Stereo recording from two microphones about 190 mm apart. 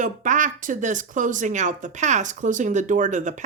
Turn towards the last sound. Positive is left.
turn(degrees=-40)  # may be behind; listen again after turning